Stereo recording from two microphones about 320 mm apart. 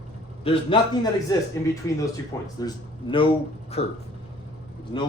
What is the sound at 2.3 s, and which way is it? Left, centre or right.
Speech, centre.